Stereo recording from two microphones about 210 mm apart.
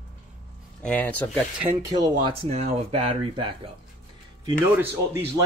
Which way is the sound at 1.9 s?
20° right (ahead or behind).